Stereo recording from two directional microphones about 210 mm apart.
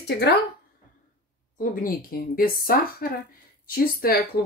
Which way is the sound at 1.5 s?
45° left (ahead or behind).